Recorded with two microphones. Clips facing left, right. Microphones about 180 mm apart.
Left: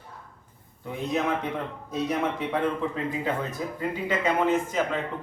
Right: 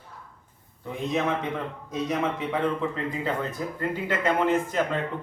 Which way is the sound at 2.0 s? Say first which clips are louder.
Right 1 dB; 5° left (ahead or behind).